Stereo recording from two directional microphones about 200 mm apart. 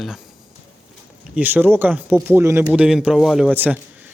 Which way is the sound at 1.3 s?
10° right (ahead or behind).